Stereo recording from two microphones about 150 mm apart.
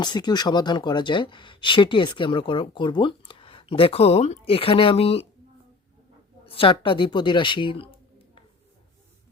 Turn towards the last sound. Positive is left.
turn(degrees=35)  # may be behind; listen again after turning